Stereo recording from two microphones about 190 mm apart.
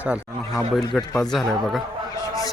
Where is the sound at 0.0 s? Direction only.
5° right (ahead or behind).